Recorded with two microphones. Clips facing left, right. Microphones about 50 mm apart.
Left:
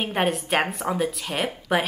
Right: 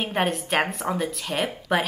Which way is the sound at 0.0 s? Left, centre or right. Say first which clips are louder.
Left 1 dB; centre.